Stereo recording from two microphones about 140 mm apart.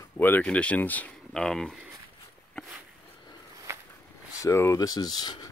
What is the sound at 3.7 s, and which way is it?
Walk, 20° right (ahead or behind).